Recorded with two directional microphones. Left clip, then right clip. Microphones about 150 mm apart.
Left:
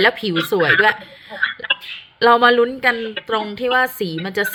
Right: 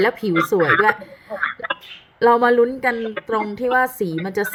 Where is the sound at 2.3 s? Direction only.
20° right (ahead or behind).